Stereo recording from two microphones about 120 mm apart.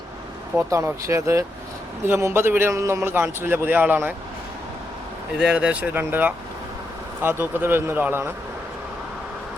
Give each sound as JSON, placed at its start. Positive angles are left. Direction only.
{"t": 0.5, "sound": "a man's voice", "side_deg": -20}
{"t": 5.4, "sound": "speech", "side_deg": -10}